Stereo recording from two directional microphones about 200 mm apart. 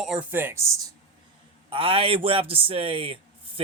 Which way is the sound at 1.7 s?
25° right (ahead or behind).